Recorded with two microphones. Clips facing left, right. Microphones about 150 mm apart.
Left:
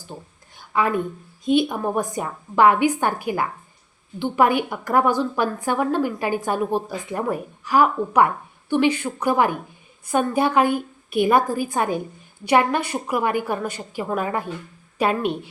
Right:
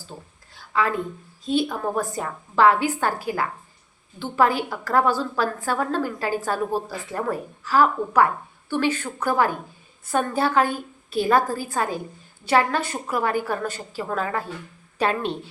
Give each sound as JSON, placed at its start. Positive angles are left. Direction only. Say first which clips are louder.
{"t": 0.1, "sound": "a woman's voice", "louder": "left 3 dB", "side_deg": 15}
{"t": 0.5, "sound": "a sound", "louder": "left 2 dB", "side_deg": 20}
{"t": 1.5, "sound": "a woman's voice", "louder": "left 4 dB", "side_deg": 15}